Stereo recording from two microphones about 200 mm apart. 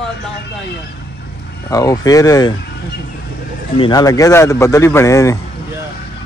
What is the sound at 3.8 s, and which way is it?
Speech, 20° left (ahead or behind).